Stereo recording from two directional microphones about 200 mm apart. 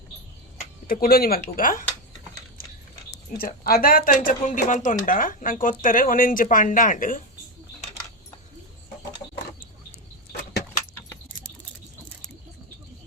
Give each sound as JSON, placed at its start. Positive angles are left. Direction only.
{"t": 0.9, "sound": "speech", "side_deg": 45}
{"t": 2.6, "sound": "a sound", "side_deg": 45}
{"t": 3.3, "sound": "speech", "side_deg": 50}